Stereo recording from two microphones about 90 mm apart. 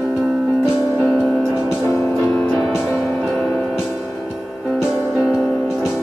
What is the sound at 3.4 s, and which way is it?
Music, 15° left (ahead or behind).